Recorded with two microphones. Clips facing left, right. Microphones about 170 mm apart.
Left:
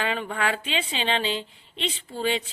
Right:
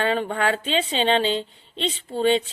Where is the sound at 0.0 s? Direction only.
35° right (ahead or behind).